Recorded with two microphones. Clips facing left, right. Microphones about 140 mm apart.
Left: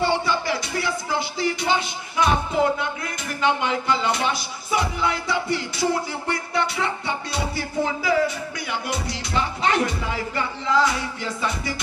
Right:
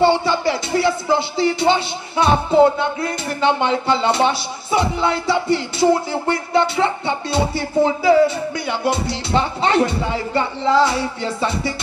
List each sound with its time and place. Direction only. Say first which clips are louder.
0.0 s music: right 7 dB; 25° right (ahead or behind)
8.6 s speech: right 7 dB; 30° right (ahead or behind)